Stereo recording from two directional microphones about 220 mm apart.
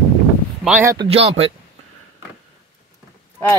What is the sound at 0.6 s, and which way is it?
Speech, 10° right (ahead or behind).